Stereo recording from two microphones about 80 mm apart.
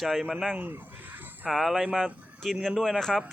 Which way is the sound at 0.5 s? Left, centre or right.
Right.